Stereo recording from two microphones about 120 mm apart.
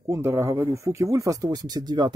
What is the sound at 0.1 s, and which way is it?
Speech, 25° right (ahead or behind).